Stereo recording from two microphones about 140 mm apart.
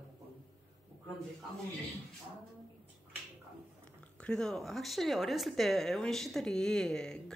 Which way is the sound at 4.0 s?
5° left (ahead or behind).